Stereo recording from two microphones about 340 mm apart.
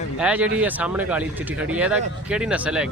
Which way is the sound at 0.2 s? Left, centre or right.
Centre.